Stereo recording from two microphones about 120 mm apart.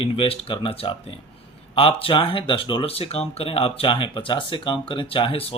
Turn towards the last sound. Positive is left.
turn(degrees=50)  # may be behind; listen again after turning